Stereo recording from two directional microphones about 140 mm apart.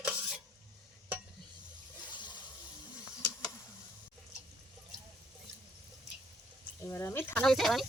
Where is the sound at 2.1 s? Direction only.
30° left (ahead or behind).